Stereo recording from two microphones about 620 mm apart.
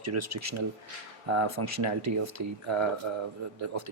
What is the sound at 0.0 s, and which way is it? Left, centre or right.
Speech, right.